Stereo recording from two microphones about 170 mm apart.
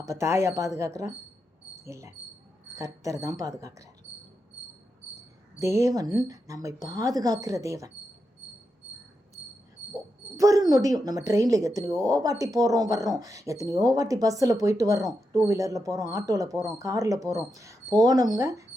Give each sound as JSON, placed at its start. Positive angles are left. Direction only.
{"t": 0.0, "sound": "speech", "side_deg": -15}
{"t": 5.8, "sound": "speech", "side_deg": -20}
{"t": 10.3, "sound": "speech", "side_deg": -20}